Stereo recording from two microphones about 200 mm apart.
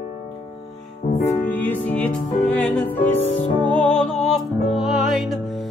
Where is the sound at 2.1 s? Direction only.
35° left (ahead or behind).